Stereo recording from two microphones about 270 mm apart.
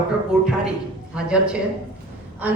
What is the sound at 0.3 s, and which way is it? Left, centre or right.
Speech, centre.